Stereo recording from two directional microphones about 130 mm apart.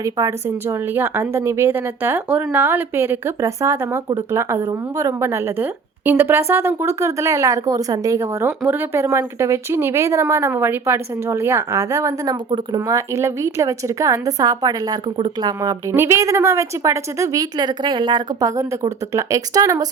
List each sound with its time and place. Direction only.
0.0 s speech: 25° right (ahead or behind)